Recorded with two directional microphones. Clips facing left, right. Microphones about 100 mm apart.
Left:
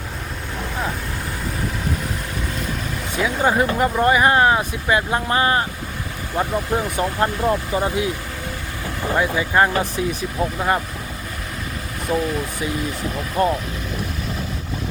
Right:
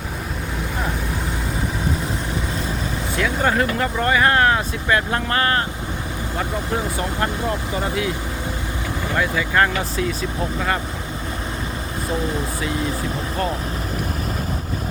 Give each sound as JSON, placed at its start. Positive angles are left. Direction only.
{"t": 3.2, "sound": "speech", "side_deg": 15}
{"t": 9.1, "sound": "speech", "side_deg": 20}
{"t": 13.4, "sound": "speech", "side_deg": 25}